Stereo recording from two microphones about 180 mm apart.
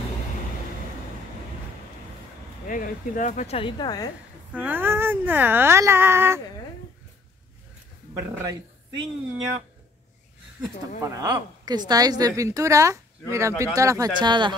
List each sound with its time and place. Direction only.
2.6 s speech: 45° left (ahead or behind); by 4.1 s 20° left (ahead or behind)
4.5 s speech: 10° right (ahead or behind)
8.1 s speech: 15° right (ahead or behind)
11.0 s a woman's voice: 20° right (ahead or behind)